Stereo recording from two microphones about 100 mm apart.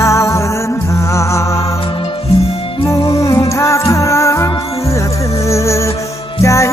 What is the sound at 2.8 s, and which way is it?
Music, 30° left (ahead or behind).